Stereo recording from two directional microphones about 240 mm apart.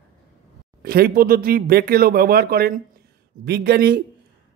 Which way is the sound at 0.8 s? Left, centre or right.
Right.